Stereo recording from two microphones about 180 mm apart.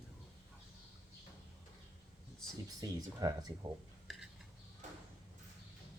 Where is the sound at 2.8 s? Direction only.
20° right (ahead or behind).